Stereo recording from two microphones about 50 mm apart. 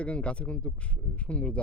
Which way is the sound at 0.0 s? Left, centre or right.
Left.